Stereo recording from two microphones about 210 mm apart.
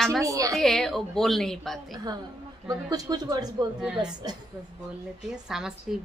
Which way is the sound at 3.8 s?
5° right (ahead or behind).